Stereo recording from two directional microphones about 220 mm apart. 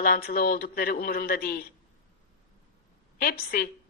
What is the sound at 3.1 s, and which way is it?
Speech, 45° left (ahead or behind).